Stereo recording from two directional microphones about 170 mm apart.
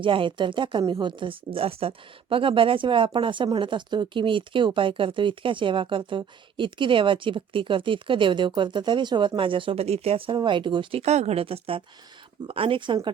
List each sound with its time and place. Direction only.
0.0 s speech: 30° right (ahead or behind)